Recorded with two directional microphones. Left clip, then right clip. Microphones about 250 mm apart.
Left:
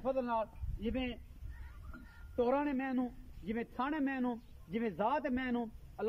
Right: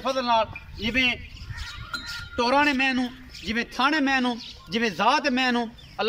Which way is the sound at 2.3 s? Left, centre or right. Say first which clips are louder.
Right 12 dB; left.